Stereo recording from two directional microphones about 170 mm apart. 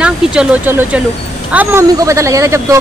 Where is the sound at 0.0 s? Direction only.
5° right (ahead or behind).